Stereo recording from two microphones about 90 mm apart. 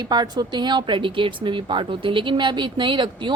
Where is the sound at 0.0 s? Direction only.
50° right (ahead or behind).